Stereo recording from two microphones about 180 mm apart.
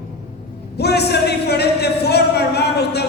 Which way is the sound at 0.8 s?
65° left (ahead or behind).